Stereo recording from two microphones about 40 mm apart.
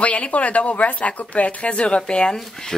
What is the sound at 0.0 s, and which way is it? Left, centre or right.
Speech, left.